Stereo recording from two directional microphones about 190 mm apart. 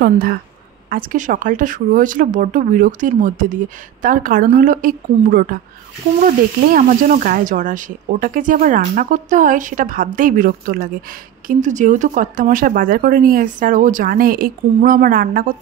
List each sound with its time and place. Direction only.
0.0 s speech: 50° right (ahead or behind)